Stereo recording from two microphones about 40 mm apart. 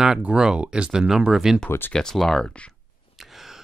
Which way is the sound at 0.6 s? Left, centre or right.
Right.